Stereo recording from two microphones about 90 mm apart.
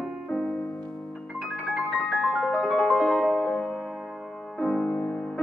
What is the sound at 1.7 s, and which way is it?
Music, 5° right (ahead or behind).